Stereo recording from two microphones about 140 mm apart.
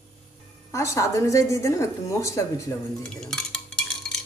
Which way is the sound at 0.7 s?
20° left (ahead or behind).